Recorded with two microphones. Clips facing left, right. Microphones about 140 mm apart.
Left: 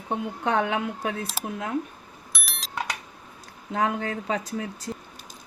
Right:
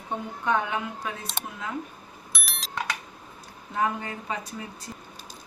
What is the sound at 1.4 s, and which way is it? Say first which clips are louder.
Speech: left 4 dB; 5° left (ahead or behind).